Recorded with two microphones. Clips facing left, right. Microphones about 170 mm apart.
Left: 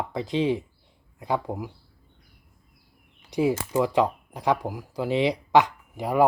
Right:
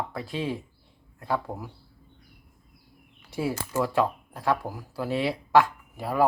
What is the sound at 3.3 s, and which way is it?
Speech, 15° left (ahead or behind).